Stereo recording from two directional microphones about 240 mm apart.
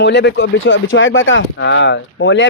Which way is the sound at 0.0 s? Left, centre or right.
Left.